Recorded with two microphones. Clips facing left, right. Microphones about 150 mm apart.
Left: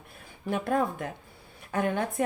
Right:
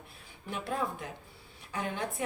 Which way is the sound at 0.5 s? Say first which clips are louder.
Left 7 dB; 50° left (ahead or behind).